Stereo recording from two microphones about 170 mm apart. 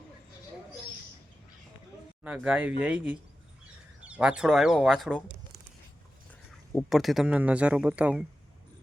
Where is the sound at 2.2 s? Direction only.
5° right (ahead or behind).